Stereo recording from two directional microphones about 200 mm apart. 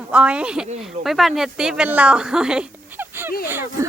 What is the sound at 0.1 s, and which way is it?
A woman's voice, 5° right (ahead or behind).